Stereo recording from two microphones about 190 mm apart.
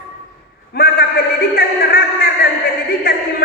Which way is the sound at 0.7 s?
50° left (ahead or behind).